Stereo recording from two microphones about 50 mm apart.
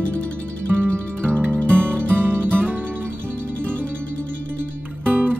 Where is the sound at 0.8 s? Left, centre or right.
Right.